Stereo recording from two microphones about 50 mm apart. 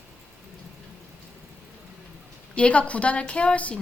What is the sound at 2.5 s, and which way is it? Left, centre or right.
A woman's voice, left.